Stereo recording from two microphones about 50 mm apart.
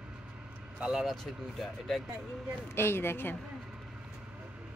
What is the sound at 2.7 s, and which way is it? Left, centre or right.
Speech, left.